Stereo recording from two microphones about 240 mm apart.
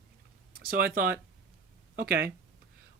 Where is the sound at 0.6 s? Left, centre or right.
Right.